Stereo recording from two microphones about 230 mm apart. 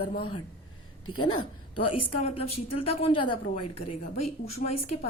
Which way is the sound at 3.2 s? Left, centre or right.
Left.